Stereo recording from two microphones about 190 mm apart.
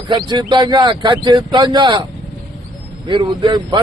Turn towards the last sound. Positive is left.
turn(degrees=-25)  # may be behind; listen again after turning